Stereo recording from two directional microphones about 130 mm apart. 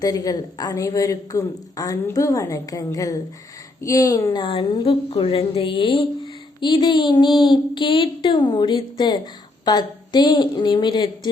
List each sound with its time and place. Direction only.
0.0 s a woman's voice: 30° left (ahead or behind)
4.4 s speech: 40° left (ahead or behind)